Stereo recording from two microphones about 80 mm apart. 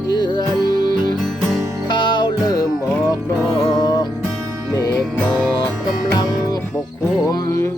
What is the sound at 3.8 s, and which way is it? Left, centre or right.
Music, left.